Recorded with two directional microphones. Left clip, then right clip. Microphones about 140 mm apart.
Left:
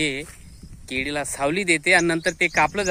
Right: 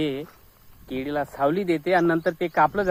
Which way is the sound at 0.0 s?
35° left (ahead or behind).